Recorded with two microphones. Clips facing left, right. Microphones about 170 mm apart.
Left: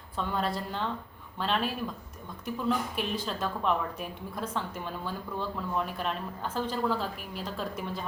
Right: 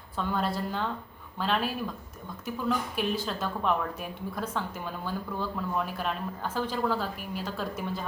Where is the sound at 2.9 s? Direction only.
5° right (ahead or behind).